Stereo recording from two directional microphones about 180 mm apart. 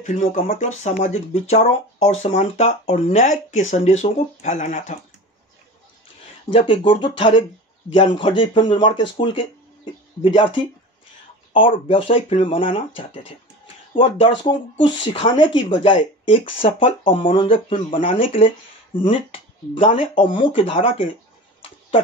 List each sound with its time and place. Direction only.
0.0 s speech: 45° left (ahead or behind)
6.5 s speech: 30° left (ahead or behind)